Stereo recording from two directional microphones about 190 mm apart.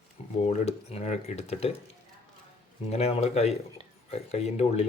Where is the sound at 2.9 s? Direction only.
35° left (ahead or behind).